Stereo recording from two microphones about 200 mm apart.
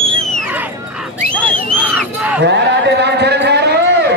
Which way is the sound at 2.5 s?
60° right (ahead or behind).